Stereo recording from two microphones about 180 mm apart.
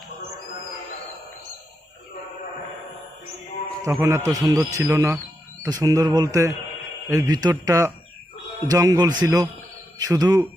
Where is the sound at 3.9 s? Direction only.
15° right (ahead or behind).